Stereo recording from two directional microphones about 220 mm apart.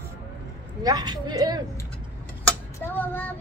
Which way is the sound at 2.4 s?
10° left (ahead or behind).